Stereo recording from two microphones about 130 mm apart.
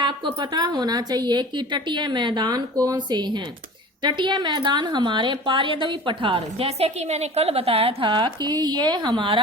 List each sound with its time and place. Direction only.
0.0 s a woman's voice: 40° right (ahead or behind)